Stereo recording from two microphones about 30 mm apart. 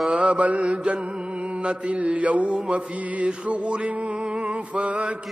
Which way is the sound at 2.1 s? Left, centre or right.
Right.